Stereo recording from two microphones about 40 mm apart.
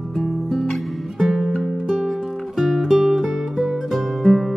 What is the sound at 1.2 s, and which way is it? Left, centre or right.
Music, centre.